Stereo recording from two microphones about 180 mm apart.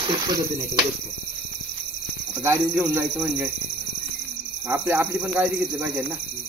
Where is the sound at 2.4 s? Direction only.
15° right (ahead or behind).